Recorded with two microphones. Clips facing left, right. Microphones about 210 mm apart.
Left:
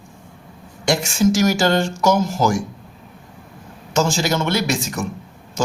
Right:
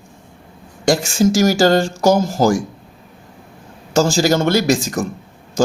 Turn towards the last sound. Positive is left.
turn(degrees=-35)  # may be behind; listen again after turning